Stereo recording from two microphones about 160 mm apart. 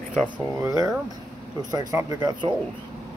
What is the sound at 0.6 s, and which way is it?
Speech, 20° right (ahead or behind).